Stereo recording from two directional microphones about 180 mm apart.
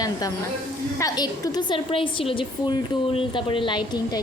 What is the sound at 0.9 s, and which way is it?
A woman's voice, 20° left (ahead or behind).